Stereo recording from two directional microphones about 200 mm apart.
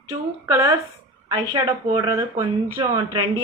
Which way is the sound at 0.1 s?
15° right (ahead or behind).